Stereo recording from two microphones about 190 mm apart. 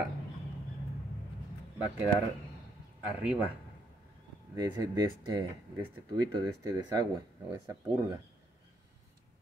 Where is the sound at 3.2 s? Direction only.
5° right (ahead or behind).